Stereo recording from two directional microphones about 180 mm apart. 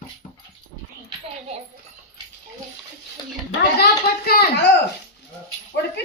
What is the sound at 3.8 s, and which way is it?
Speech, 60° left (ahead or behind).